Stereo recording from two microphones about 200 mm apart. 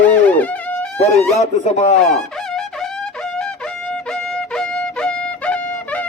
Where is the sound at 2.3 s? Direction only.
Centre (ahead or behind).